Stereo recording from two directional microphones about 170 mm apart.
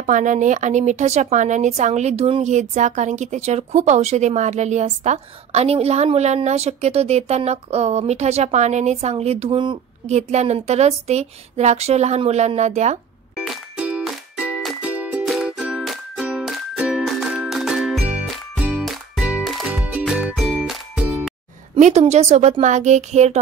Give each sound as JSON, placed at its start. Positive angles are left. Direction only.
{"t": 0.0, "sound": "speech", "side_deg": -45}
{"t": 10.0, "sound": "speech", "side_deg": -40}
{"t": 13.4, "sound": "music", "side_deg": -5}
{"t": 21.7, "sound": "speech", "side_deg": -45}